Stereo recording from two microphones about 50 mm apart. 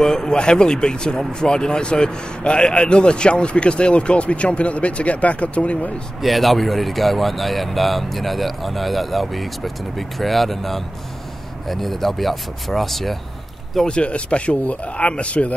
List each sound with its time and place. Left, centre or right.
0.0 s speech: centre
6.2 s speech: centre
13.8 s speech: left